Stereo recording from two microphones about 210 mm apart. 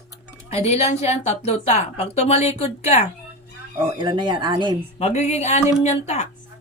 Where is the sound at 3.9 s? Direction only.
20° right (ahead or behind).